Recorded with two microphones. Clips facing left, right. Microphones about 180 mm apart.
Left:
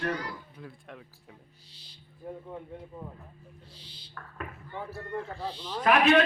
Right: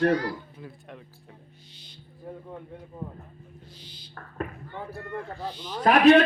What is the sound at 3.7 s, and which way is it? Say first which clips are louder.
Speech: right 4 dB; 30° left (ahead or behind).